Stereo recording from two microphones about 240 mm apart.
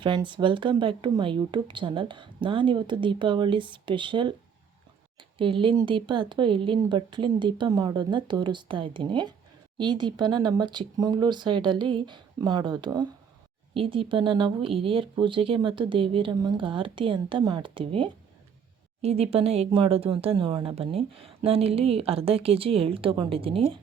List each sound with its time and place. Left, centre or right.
0.0 s speech: centre
5.4 s speech: right